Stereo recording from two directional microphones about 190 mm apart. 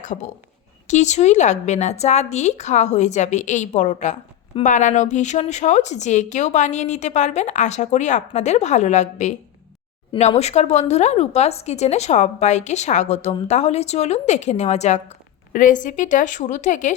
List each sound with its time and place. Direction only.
0.0 s a woman's voice: 40° left (ahead or behind)